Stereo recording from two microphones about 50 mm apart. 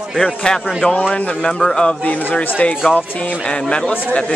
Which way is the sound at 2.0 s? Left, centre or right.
Left.